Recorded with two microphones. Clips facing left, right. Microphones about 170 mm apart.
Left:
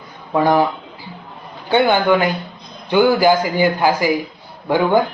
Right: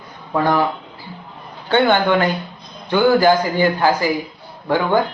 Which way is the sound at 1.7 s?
10° left (ahead or behind).